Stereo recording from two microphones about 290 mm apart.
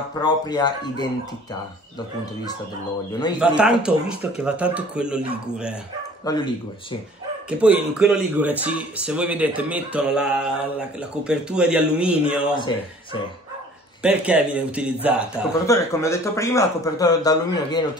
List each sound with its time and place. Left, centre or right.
0.2 s speech: centre
3.3 s speech: centre
6.3 s speech: centre
7.4 s speech: centre
12.5 s speech: centre
14.0 s speech: centre
15.6 s speech: centre